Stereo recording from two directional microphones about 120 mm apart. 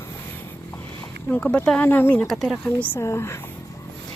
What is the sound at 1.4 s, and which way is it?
Speech, 10° left (ahead or behind).